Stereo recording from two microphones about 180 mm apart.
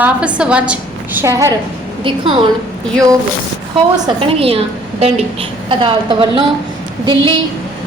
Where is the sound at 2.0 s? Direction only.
30° right (ahead or behind).